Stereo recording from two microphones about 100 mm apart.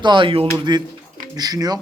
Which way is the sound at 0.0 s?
50° right (ahead or behind).